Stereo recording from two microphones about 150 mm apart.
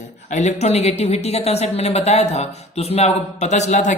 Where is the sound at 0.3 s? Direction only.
50° left (ahead or behind).